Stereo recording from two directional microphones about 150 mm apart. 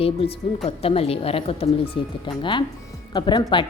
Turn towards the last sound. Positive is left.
turn(degrees=30)  # may be behind; listen again after turning